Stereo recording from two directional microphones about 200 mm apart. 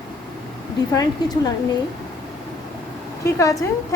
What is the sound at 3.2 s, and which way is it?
Speech, 15° left (ahead or behind).